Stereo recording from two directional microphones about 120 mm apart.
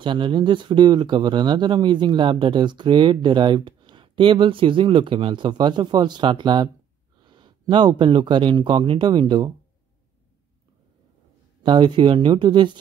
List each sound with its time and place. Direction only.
0.0 s speech: 40° right (ahead or behind)
11.6 s speech: 40° right (ahead or behind)